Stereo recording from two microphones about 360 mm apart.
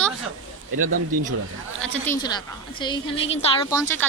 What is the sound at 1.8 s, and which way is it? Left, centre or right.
A woman's voice, centre.